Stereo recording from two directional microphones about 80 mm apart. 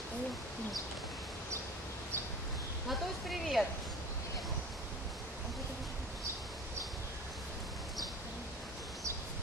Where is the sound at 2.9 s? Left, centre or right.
Centre.